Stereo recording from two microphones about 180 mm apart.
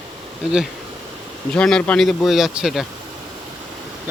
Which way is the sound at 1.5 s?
5° left (ahead or behind).